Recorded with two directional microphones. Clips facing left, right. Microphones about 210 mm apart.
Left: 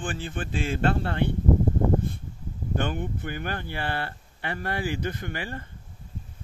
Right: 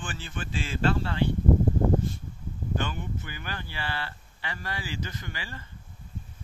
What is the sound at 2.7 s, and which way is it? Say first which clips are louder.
Speech: left 4 dB; 55° left (ahead or behind).